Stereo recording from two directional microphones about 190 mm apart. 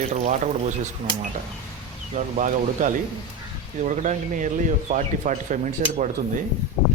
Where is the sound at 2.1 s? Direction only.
40° right (ahead or behind).